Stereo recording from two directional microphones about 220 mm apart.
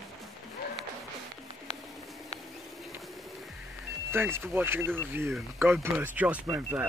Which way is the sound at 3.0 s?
Centre (ahead or behind).